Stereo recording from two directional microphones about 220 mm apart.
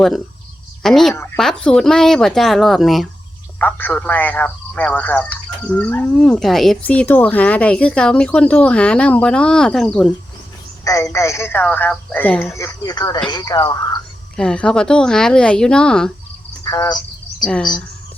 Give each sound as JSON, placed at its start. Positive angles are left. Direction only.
{"t": 0.8, "sound": "a man's voice", "side_deg": 0}
{"t": 10.8, "sound": "speech", "side_deg": 15}
{"t": 14.3, "sound": "a man's voice", "side_deg": 5}
{"t": 16.6, "sound": "speech", "side_deg": 20}
{"t": 17.4, "sound": "speech", "side_deg": 0}